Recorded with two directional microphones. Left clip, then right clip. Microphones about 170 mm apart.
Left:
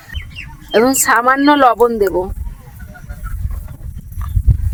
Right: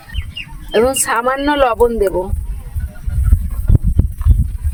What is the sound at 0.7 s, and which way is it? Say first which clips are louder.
Speech: left 2 dB; 55° left (ahead or behind).